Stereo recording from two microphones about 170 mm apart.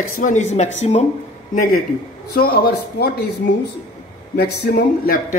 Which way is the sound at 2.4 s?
65° left (ahead or behind).